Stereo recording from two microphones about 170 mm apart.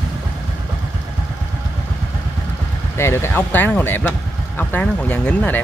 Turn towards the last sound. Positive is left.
turn(degrees=10)  # may be behind; listen again after turning